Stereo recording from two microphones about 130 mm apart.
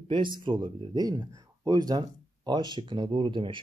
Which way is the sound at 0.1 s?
40° right (ahead or behind).